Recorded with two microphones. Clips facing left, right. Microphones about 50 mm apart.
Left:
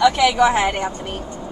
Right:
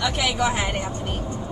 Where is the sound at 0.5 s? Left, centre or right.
Left.